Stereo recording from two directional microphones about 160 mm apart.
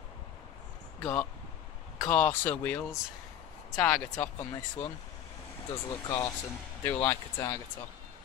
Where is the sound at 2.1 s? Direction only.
10° left (ahead or behind).